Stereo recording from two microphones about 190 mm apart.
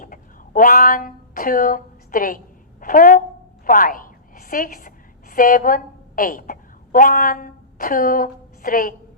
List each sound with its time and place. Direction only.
0.0 s a woman's voice: 45° left (ahead or behind)